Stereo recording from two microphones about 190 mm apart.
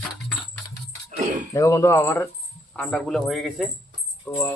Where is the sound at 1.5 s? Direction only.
15° left (ahead or behind).